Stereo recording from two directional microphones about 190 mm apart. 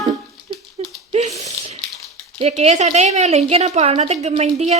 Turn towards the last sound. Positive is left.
turn(degrees=-35)  # may be behind; listen again after turning